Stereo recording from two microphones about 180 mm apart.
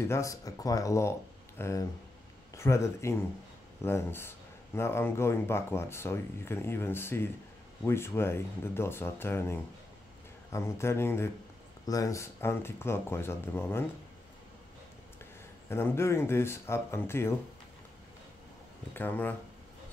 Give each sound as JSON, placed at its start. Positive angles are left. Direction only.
{"t": 0.1, "sound": "speech", "side_deg": 15}
{"t": 15.7, "sound": "speech", "side_deg": 15}
{"t": 18.9, "sound": "speech", "side_deg": 10}